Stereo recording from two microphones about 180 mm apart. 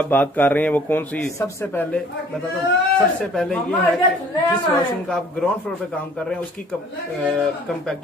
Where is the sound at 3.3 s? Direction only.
5° left (ahead or behind).